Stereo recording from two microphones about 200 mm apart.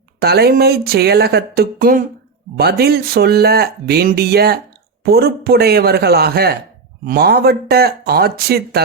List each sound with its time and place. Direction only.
0.2 s speech: 50° right (ahead or behind)